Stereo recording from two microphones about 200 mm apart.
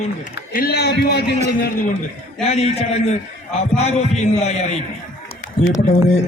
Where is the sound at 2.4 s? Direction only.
30° left (ahead or behind).